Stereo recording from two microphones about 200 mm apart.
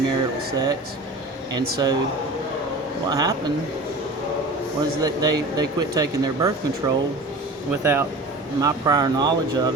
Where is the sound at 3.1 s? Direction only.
15° right (ahead or behind).